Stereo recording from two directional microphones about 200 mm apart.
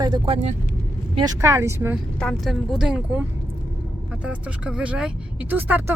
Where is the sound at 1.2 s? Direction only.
15° right (ahead or behind).